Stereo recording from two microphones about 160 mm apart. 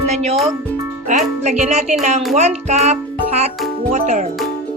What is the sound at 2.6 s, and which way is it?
Music, 45° right (ahead or behind).